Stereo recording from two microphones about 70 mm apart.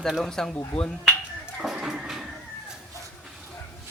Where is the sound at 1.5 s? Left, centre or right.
Centre.